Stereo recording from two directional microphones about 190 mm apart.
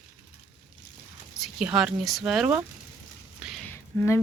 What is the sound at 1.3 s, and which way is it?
Speech, 5° right (ahead or behind).